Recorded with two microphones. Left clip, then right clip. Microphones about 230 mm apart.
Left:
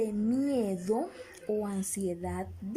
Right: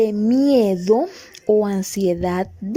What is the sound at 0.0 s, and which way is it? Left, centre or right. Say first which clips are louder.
Speech: right 14 dB; right.